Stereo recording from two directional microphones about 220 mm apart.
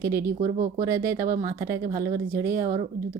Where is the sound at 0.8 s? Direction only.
10° right (ahead or behind).